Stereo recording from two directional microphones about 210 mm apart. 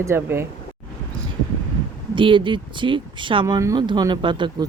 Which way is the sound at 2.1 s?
25° right (ahead or behind).